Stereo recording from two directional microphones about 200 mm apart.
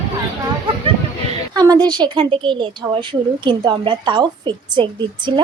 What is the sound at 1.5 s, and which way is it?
A woman's voice, 20° right (ahead or behind).